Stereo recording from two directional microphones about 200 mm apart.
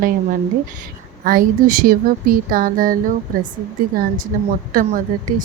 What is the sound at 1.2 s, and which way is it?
Speech, 45° right (ahead or behind).